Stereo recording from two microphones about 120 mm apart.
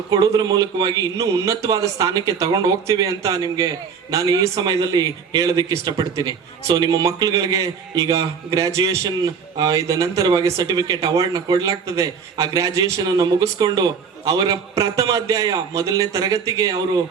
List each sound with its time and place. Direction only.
0.1 s a man's voice: 35° right (ahead or behind)